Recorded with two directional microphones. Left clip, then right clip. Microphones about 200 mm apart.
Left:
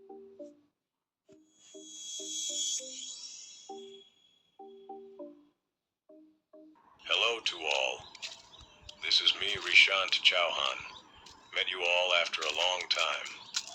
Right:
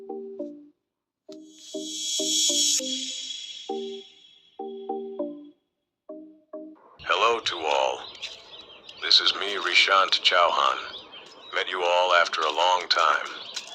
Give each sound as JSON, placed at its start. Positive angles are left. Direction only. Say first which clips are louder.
{"t": 0.4, "sound": "music", "louder": "right 12 dB", "side_deg": -55}
{"t": 7.0, "sound": "a sound", "louder": "right 7 dB", "side_deg": -40}
{"t": 8.2, "sound": "chicken", "louder": "right 6 dB", "side_deg": 10}
{"t": 9.0, "sound": "speech", "louder": "right 7 dB", "side_deg": -35}
{"t": 13.5, "sound": "bird", "louder": "right 2 dB", "side_deg": 5}